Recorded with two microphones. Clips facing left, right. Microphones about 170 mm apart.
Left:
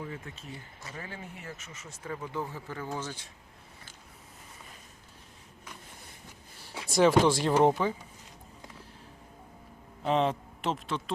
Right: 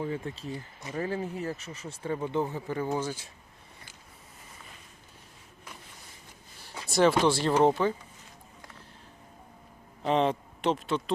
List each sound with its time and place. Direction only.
0.0 s speech: 30° right (ahead or behind); by 3.2 s 10° right (ahead or behind)
6.7 s speech: 10° left (ahead or behind)
10.0 s speech: centre (ahead or behind)